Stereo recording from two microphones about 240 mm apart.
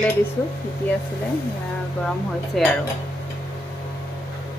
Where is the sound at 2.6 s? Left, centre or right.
Centre.